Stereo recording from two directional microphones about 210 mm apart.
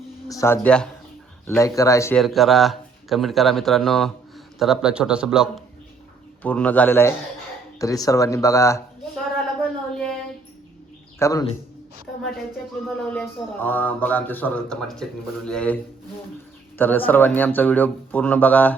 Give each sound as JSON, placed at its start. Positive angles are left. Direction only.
{"t": 0.3, "sound": "speech", "side_deg": 15}
{"t": 2.1, "sound": "speech", "side_deg": 0}
{"t": 6.4, "sound": "speech", "side_deg": 5}
{"t": 9.6, "sound": "a sound", "side_deg": 0}
{"t": 11.2, "sound": "speech", "side_deg": 15}
{"t": 13.0, "sound": "speech", "side_deg": 5}